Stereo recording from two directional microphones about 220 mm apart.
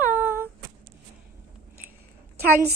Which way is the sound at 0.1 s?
10° right (ahead or behind).